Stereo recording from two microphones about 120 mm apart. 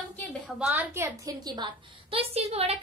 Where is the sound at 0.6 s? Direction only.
15° right (ahead or behind); by 1.7 s 35° right (ahead or behind).